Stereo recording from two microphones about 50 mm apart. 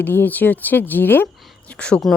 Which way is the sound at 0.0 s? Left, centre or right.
Left.